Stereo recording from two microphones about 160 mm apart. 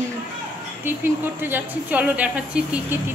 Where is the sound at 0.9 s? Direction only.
15° right (ahead or behind).